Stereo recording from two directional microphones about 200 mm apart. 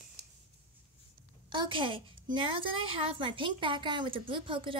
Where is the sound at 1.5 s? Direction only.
25° right (ahead or behind).